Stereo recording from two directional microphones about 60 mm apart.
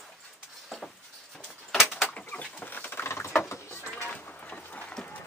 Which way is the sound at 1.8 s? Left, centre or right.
Left.